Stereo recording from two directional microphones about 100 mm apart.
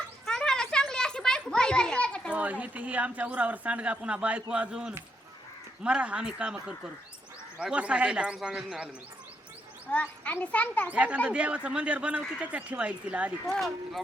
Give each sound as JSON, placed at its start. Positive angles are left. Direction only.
{"t": 0.3, "sound": "children playing", "side_deg": 5}
{"t": 2.3, "sound": "speech", "side_deg": -15}
{"t": 9.8, "sound": "speech", "side_deg": 15}
{"t": 10.9, "sound": "speech", "side_deg": -10}
{"t": 13.5, "sound": "speech", "side_deg": 0}